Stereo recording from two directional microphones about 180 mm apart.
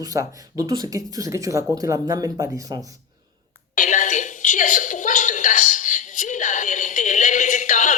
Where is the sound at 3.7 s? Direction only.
45° left (ahead or behind).